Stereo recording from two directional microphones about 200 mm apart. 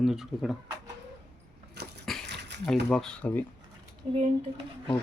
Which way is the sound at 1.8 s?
55° right (ahead or behind).